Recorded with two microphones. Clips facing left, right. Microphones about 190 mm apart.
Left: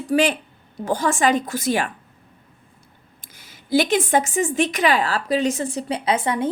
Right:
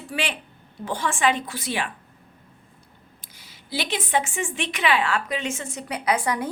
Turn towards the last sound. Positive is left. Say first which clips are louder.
# left 3 dB
turn(degrees=25)  # may be behind; listen again after turning